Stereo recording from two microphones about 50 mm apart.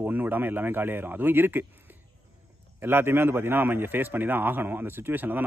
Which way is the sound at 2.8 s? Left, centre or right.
Right.